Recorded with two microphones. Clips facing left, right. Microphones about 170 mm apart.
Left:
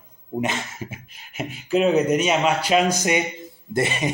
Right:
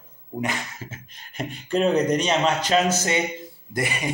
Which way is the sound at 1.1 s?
5° left (ahead or behind).